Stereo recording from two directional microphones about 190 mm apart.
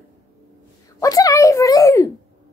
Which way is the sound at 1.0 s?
20° left (ahead or behind).